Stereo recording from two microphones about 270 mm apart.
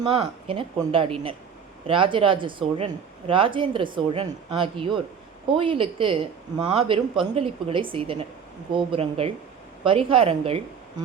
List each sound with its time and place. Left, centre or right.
0.0 s speech: centre